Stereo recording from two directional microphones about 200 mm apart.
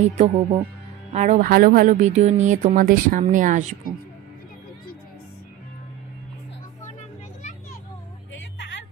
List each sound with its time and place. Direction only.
0.0 s speech: 30° right (ahead or behind)
8.3 s music: 65° left (ahead or behind)